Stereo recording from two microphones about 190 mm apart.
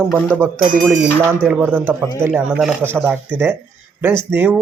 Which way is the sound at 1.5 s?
10° right (ahead or behind).